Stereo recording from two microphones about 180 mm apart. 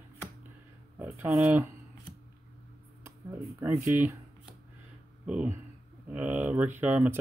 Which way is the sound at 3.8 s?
10° right (ahead or behind).